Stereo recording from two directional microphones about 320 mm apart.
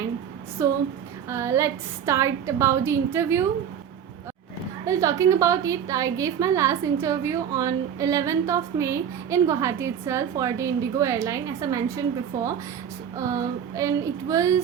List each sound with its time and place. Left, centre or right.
0.6 s a woman's voice: centre
4.9 s a woman's voice: centre
13.1 s a woman's voice: centre